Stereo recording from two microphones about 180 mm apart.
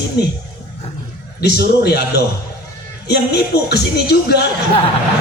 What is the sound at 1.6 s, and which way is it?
A man's voice, 65° left (ahead or behind).